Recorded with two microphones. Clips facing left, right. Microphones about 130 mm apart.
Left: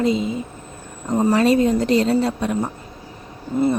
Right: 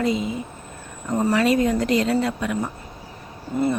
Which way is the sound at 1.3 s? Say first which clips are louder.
Left 3 dB; 30° left (ahead or behind).